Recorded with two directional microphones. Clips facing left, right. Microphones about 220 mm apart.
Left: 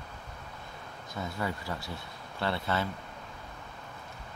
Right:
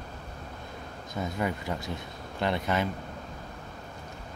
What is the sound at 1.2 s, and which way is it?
Speech, 20° right (ahead or behind).